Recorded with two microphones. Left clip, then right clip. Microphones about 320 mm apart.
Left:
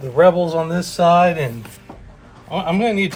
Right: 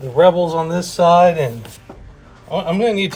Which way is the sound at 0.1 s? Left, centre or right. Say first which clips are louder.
Right 1 dB; centre.